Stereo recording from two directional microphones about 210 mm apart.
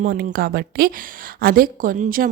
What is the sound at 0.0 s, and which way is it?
A woman's voice, 40° right (ahead or behind).